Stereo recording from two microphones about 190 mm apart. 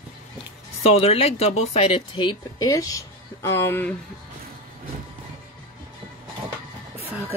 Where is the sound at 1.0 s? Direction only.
30° left (ahead or behind); by 3.9 s 10° left (ahead or behind).